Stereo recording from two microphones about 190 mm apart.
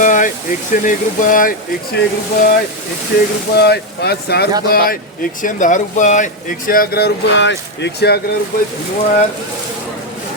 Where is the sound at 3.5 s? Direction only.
60° left (ahead or behind).